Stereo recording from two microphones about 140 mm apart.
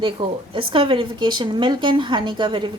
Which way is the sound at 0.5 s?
40° right (ahead or behind).